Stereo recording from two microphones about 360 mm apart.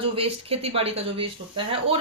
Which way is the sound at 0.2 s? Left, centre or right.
Centre.